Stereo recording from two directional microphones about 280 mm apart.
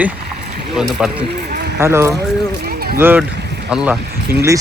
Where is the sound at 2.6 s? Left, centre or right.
Right.